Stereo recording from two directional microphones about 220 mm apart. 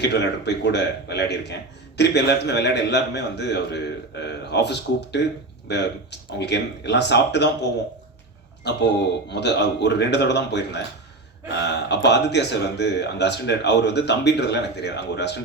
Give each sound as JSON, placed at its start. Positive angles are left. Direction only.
{"t": 0.0, "sound": "speech", "side_deg": 50}
{"t": 12.0, "sound": "speech", "side_deg": 50}